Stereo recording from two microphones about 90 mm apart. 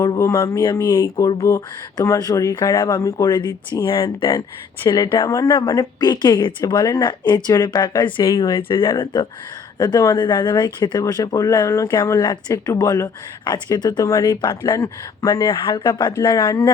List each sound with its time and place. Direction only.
0.2 s speech: 35° left (ahead or behind)
0.6 s speech: 50° left (ahead or behind)
1.4 s speech: 35° left (ahead or behind)
3.8 s speech: 80° left
4.9 s speech: 60° left (ahead or behind)
5.2 s speech: 40° left (ahead or behind)
5.5 s speech: 55° left (ahead or behind)
9.7 s speech: 50° left (ahead or behind)
11.0 s speech: 45° left (ahead or behind)
14.3 s speech: 55° left (ahead or behind)
14.6 s speech: 40° left (ahead or behind)
15.3 s speech: 65° left (ahead or behind)